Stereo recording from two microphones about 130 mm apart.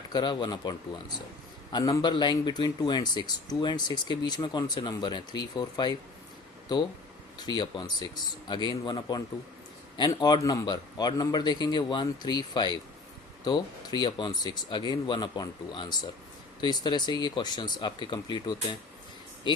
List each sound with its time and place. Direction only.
0.1 s speech: 35° left (ahead or behind)